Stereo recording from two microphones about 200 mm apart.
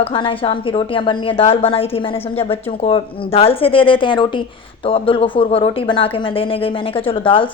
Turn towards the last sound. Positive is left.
turn(degrees=25)  # may be behind; listen again after turning